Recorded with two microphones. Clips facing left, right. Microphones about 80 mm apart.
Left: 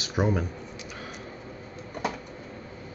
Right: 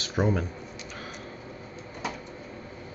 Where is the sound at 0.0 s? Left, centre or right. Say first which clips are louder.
Even; centre.